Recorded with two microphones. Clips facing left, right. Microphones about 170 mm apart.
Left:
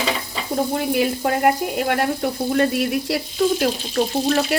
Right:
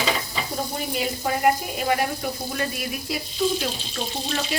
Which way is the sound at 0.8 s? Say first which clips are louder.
Left 7 dB; 65° left (ahead or behind).